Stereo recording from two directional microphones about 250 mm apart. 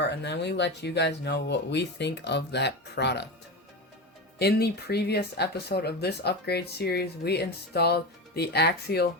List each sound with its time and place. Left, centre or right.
0.0 s speech: left
4.4 s speech: left